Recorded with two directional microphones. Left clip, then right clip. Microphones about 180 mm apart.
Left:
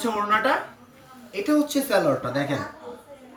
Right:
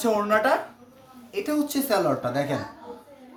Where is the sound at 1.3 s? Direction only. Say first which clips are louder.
Left 4 dB; 60° right (ahead or behind).